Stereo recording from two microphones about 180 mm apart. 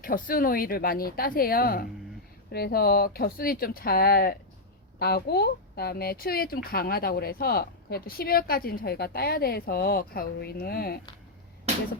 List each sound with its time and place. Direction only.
0.0 s a woman's voice: 50° left (ahead or behind)